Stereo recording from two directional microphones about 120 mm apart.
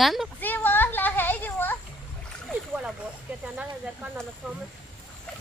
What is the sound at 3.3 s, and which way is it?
Speech, 15° right (ahead or behind).